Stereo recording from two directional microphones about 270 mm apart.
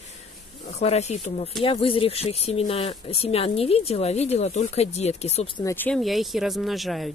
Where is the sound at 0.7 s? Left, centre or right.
Left.